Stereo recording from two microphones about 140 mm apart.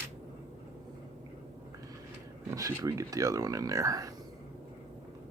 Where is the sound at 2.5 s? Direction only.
25° right (ahead or behind).